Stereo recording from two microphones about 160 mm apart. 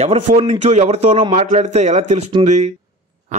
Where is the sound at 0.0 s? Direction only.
45° right (ahead or behind).